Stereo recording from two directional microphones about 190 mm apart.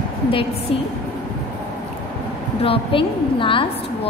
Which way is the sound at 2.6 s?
30° left (ahead or behind).